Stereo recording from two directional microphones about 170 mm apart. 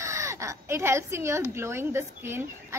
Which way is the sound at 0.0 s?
15° right (ahead or behind).